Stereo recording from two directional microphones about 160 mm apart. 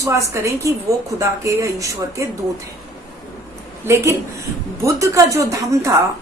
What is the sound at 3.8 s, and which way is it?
Speech, 20° right (ahead or behind).